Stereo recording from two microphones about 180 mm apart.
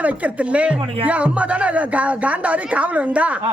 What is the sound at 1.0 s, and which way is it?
Speech, 10° right (ahead or behind).